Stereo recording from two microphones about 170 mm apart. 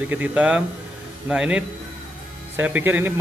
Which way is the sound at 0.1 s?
10° right (ahead or behind).